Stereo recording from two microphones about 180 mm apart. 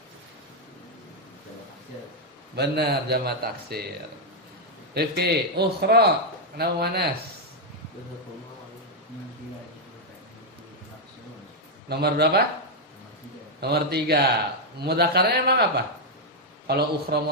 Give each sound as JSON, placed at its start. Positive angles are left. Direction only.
{"t": 2.6, "sound": "a man's voice", "side_deg": -65}
{"t": 4.9, "sound": "a man's voice", "side_deg": -65}
{"t": 11.9, "sound": "a man's voice", "side_deg": -65}
{"t": 13.6, "sound": "a man's voice", "side_deg": -65}
{"t": 16.6, "sound": "a man's voice", "side_deg": -65}